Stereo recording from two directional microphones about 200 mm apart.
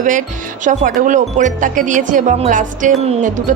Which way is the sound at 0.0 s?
40° right (ahead or behind).